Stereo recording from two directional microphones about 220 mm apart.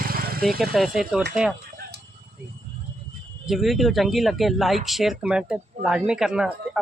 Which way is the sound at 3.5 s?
Centre (ahead or behind).